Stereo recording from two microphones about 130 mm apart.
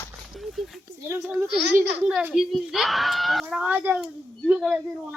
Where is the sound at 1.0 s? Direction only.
15° right (ahead or behind).